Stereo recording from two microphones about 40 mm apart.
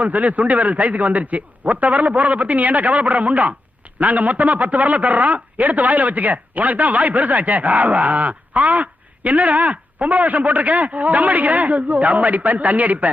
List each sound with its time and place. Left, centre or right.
0.0 s a man's voice: right